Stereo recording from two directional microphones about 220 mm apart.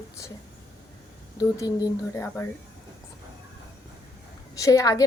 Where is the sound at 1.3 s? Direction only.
15° left (ahead or behind).